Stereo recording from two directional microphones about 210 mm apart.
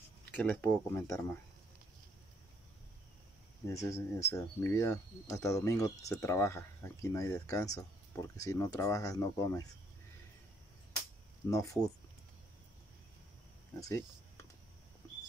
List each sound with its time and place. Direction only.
0.3 s speech: 5° left (ahead or behind)
3.6 s speech: 15° left (ahead or behind)
11.4 s speech: 15° left (ahead or behind)
13.7 s speech: 15° left (ahead or behind)